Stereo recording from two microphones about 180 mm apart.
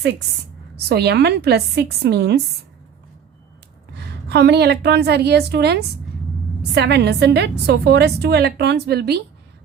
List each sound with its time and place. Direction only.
0.9 s a woman's voice: 65° right (ahead or behind)
3.9 s a woman's voice: 65° right (ahead or behind)